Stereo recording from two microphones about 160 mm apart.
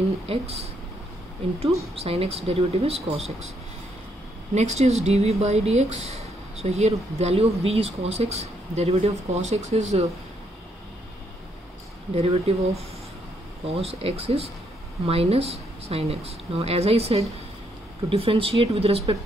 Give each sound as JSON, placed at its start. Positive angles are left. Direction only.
{"t": 0.3, "sound": "speech", "side_deg": -40}
{"t": 4.6, "sound": "speech", "side_deg": -45}
{"t": 12.1, "sound": "speech", "side_deg": -40}
{"t": 13.7, "sound": "speech", "side_deg": -40}